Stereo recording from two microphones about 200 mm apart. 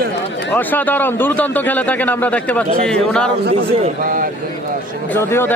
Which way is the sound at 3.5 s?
30° right (ahead or behind).